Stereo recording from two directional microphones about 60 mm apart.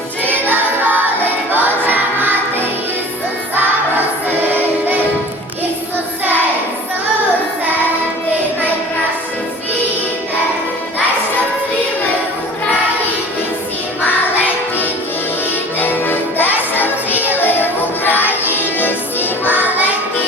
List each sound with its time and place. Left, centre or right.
1.5 s music: right
15.8 s music: left